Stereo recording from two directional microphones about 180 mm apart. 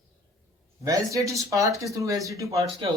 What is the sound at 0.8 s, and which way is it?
Speech, 15° right (ahead or behind).